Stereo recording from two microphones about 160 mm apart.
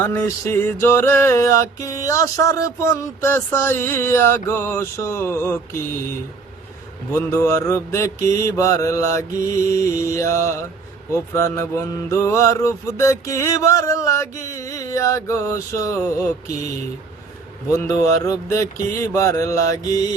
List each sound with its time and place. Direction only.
0.0 s music: 15° left (ahead or behind)
7.1 s mantra: 15° left (ahead or behind)
11.1 s music: 15° left (ahead or behind)
14.5 s mantra: 20° left (ahead or behind)
17.7 s music: 20° left (ahead or behind)
19.1 s mantra: 20° left (ahead or behind)